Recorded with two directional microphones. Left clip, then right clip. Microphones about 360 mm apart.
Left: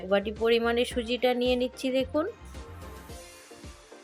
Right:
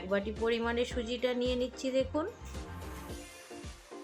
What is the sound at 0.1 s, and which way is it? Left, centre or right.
Speech, centre.